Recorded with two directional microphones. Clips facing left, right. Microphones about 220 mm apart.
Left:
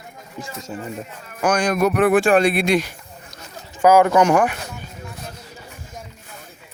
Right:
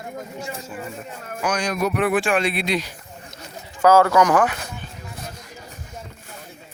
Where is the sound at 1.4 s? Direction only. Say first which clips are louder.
Left 5 dB; 50° left (ahead or behind).